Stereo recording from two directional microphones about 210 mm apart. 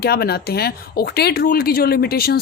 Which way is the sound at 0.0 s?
50° left (ahead or behind).